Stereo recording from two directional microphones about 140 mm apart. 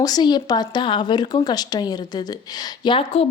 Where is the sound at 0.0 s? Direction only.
30° left (ahead or behind).